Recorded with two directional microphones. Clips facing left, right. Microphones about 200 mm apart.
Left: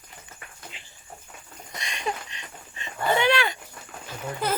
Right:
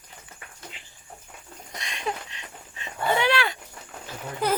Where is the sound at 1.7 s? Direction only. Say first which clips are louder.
Even; centre (ahead or behind).